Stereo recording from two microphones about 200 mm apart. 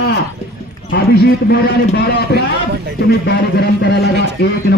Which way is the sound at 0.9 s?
55° left (ahead or behind).